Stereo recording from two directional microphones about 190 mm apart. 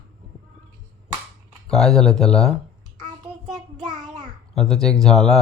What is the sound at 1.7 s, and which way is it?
Speech, centre (ahead or behind).